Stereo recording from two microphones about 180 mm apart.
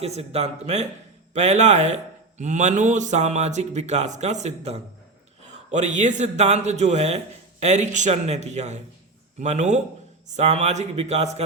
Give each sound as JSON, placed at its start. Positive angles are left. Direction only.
{"t": 0.0, "sound": "a man's voice", "side_deg": -35}